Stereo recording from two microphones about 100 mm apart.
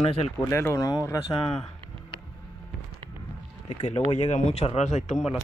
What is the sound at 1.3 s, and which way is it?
Speech, 70° left (ahead or behind).